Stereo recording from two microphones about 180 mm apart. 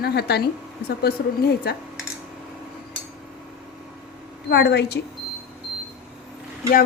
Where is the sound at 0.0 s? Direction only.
65° left (ahead or behind).